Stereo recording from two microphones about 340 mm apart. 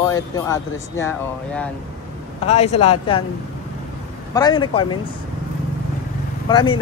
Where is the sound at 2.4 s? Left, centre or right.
Centre.